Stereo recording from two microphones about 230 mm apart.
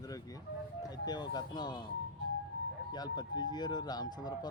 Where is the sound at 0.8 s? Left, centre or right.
Centre.